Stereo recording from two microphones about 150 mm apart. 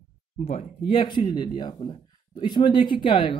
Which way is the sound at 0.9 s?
30° left (ahead or behind).